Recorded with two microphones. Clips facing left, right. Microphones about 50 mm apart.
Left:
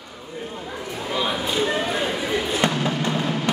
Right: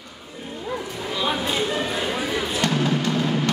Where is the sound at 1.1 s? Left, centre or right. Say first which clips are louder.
Even; centre.